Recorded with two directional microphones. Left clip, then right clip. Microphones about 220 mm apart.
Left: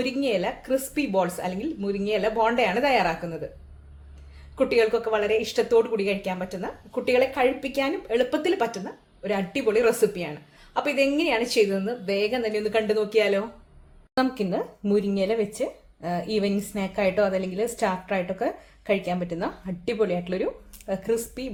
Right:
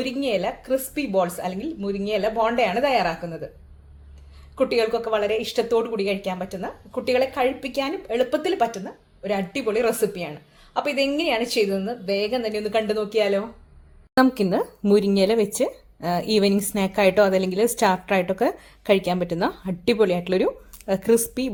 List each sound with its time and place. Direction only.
0.0 s speech: 10° right (ahead or behind)
4.5 s speech: 10° right (ahead or behind)
14.2 s speech: 35° right (ahead or behind)